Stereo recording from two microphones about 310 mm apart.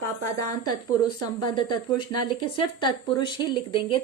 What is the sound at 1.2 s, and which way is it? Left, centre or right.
Speech, centre.